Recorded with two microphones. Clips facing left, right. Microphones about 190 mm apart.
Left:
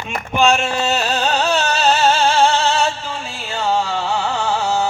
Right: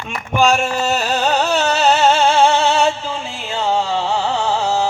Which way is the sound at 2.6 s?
20° right (ahead or behind).